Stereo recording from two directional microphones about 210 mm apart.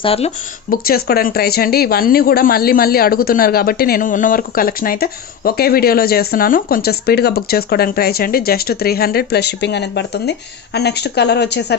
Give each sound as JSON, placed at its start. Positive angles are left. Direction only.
{"t": 0.0, "sound": "speech", "side_deg": 25}
{"t": 0.7, "sound": "speech", "side_deg": 45}